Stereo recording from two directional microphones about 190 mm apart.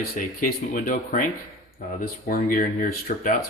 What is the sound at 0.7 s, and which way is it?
Speech, 45° left (ahead or behind).